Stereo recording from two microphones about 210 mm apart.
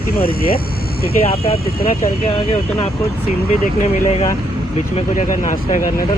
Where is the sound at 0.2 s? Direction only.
45° left (ahead or behind).